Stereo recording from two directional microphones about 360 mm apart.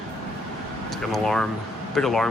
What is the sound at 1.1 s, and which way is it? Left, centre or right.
Speech, centre.